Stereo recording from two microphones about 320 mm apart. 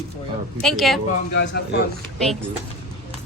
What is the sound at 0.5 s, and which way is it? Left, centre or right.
Speech, centre.